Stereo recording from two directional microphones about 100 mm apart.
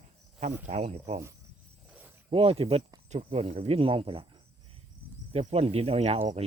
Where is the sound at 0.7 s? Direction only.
90° right.